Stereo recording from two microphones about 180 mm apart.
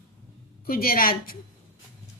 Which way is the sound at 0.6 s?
55° left (ahead or behind).